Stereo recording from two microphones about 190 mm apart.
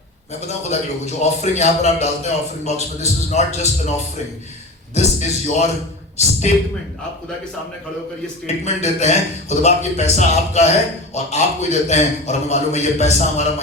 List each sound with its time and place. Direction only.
0.4 s a man's voice: 35° left (ahead or behind)
4.9 s a man's voice: 35° left (ahead or behind)
8.4 s a man's voice: 35° left (ahead or behind)